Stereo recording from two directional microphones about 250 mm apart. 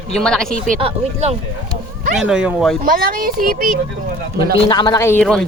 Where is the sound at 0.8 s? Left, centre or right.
Right.